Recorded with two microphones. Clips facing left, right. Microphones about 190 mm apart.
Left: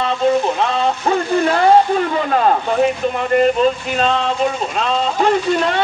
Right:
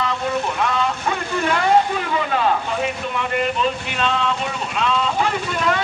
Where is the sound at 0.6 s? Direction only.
30° left (ahead or behind).